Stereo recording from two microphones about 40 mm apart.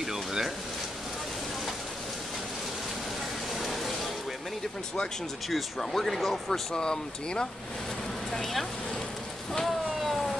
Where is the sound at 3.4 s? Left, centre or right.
Centre.